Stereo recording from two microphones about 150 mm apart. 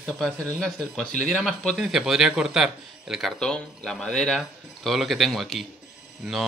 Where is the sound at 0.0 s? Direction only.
5° left (ahead or behind).